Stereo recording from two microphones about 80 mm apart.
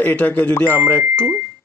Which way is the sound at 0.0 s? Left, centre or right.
Centre.